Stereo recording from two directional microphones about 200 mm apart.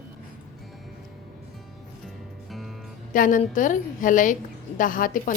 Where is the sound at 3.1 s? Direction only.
40° left (ahead or behind).